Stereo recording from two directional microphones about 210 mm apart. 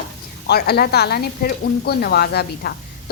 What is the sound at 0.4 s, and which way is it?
Speech, 50° left (ahead or behind).